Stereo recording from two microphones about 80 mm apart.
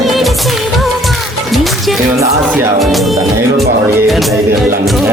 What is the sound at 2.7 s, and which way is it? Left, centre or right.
Music, centre.